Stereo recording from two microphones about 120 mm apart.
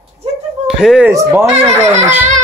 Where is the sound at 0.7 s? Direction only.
5° right (ahead or behind).